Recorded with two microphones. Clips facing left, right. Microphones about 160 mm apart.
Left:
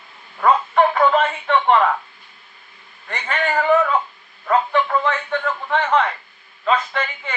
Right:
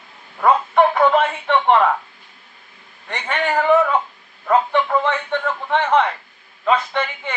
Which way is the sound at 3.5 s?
5° right (ahead or behind).